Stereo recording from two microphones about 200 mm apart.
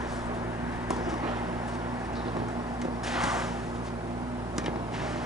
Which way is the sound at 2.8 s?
Centre (ahead or behind).